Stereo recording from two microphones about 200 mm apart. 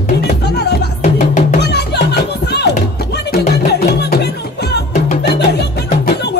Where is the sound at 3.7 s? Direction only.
55° left (ahead or behind).